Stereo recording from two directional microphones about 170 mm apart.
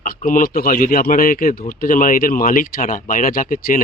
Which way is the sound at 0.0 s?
55° left (ahead or behind).